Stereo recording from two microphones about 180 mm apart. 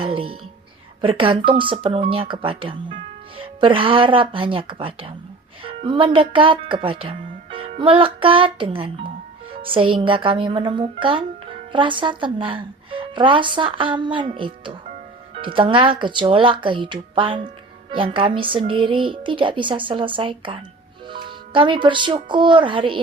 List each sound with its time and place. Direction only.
0.0 s speech: 30° right (ahead or behind)